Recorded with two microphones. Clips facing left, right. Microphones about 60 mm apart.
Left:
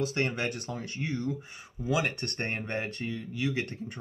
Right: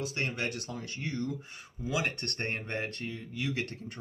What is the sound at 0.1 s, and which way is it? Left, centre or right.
Speech, left.